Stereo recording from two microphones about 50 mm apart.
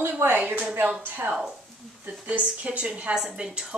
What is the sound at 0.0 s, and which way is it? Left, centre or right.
Speech, right.